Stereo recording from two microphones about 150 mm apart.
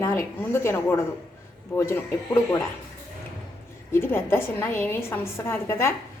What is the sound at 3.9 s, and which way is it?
A woman's voice, 15° left (ahead or behind).